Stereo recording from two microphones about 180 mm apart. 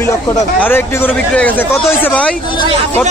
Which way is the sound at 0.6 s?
10° left (ahead or behind).